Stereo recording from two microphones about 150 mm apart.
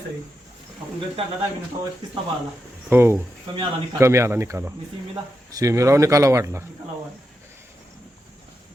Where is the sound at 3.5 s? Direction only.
35° right (ahead or behind).